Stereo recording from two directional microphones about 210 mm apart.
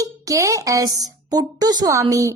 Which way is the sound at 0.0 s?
15° right (ahead or behind).